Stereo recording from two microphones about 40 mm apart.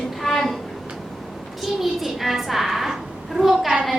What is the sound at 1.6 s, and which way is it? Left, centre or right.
A child's voice, centre.